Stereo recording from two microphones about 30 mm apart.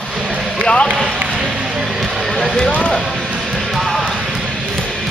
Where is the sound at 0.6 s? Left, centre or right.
Left.